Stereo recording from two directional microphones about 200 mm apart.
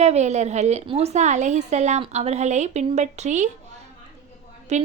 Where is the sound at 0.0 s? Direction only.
35° right (ahead or behind).